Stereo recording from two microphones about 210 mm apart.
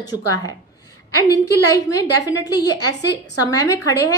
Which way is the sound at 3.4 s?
15° left (ahead or behind).